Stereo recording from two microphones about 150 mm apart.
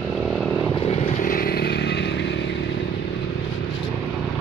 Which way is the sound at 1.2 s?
80° left.